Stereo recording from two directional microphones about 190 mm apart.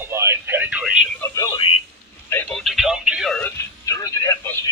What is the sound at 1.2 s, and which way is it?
Music, 20° left (ahead or behind).